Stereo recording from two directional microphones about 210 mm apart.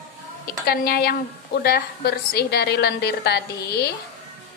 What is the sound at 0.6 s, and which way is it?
A woman's voice, 45° left (ahead or behind).